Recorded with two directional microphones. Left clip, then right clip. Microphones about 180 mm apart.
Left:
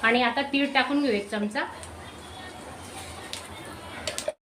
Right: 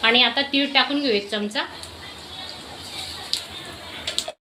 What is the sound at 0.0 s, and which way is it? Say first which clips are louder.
A woman's voice: right 5 dB; 20° right (ahead or behind).